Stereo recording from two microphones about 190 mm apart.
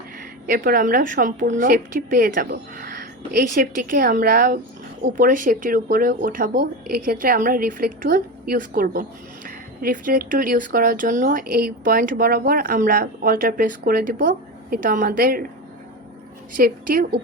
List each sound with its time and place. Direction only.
0.4 s a woman's voice: 50° right (ahead or behind)
16.6 s speech: 50° right (ahead or behind)